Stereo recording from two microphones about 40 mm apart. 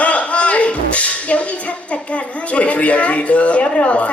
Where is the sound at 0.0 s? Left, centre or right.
Left.